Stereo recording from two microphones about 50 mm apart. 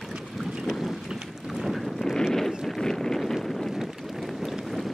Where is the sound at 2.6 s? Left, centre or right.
Centre.